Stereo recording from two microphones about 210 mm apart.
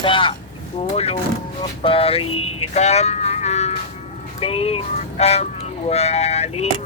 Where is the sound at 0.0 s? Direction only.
25° left (ahead or behind).